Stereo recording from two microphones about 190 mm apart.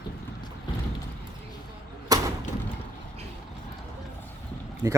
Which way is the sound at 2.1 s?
20° right (ahead or behind).